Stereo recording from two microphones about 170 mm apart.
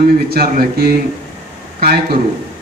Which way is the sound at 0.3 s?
65° right (ahead or behind).